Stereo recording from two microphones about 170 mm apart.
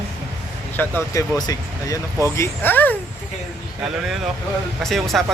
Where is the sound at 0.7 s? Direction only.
10° left (ahead or behind).